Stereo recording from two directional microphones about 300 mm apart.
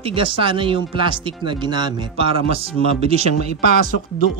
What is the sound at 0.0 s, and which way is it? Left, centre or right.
Speech, centre.